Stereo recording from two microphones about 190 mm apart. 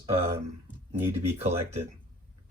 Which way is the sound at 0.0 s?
30° right (ahead or behind).